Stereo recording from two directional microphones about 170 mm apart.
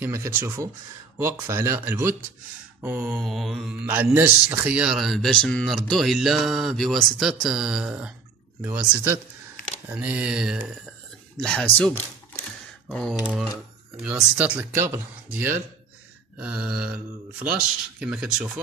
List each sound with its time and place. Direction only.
0.0 s speech: 15° right (ahead or behind); by 3.7 s centre (ahead or behind)
3.8 s speech: 10° right (ahead or behind); by 12.4 s 10° left (ahead or behind)
12.8 s speech: centre (ahead or behind)